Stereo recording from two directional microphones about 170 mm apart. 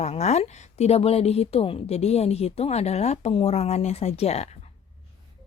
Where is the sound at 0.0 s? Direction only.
40° left (ahead or behind).